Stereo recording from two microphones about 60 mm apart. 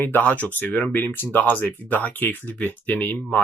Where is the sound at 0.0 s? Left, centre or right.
Left.